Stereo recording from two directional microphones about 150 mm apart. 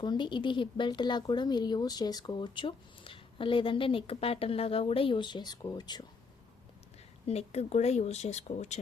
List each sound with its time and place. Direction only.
0.0 s speech: 30° left (ahead or behind)
7.3 s speech: 45° left (ahead or behind)